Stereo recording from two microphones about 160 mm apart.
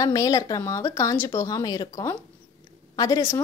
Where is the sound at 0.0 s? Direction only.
20° left (ahead or behind).